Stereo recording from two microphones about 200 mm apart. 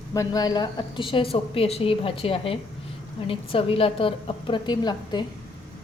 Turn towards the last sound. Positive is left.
turn(degrees=20)  # may be behind; listen again after turning